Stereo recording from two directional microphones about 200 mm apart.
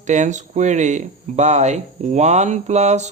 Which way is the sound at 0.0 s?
35° right (ahead or behind).